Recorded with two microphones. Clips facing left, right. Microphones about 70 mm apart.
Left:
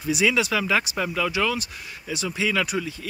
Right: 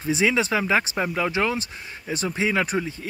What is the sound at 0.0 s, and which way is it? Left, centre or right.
Speech, right.